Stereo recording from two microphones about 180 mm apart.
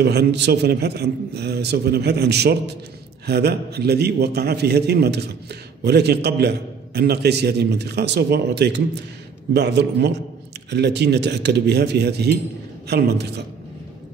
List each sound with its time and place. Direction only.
0.0 s a man's voice: 65° right (ahead or behind)